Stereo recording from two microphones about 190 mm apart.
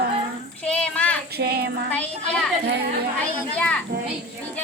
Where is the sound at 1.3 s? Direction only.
55° right (ahead or behind).